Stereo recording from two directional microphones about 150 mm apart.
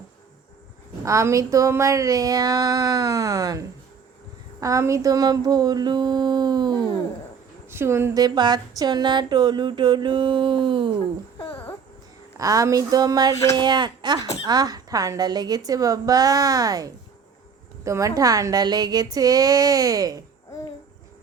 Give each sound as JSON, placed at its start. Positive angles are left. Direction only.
{"t": 1.0, "sound": "speech", "side_deg": -20}
{"t": 4.6, "sound": "speech", "side_deg": -20}
{"t": 7.7, "sound": "speech", "side_deg": -15}
{"t": 12.4, "sound": "speech", "side_deg": -25}